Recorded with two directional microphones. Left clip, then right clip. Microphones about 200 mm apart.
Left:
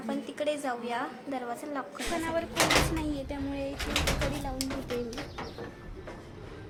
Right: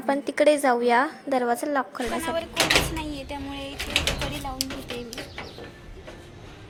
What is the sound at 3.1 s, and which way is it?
Music, 15° left (ahead or behind).